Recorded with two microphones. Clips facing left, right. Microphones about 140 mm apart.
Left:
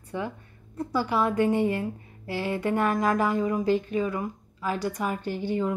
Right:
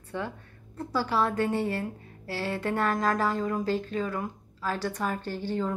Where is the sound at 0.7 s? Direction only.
15° left (ahead or behind).